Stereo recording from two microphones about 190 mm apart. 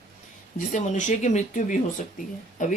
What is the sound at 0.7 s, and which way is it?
Speech, 40° left (ahead or behind).